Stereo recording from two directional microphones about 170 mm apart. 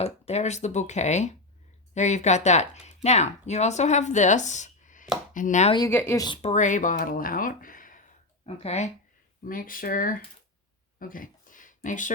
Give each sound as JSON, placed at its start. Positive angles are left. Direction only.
{"t": 0.0, "sound": "speech", "side_deg": 40}
{"t": 5.7, "sound": "speech", "side_deg": 15}
{"t": 6.2, "sound": "speech", "side_deg": 30}
{"t": 6.5, "sound": "speech", "side_deg": 45}
{"t": 8.6, "sound": "speech", "side_deg": 40}
{"t": 9.4, "sound": "speech", "side_deg": 55}
{"t": 11.0, "sound": "a sound", "side_deg": 55}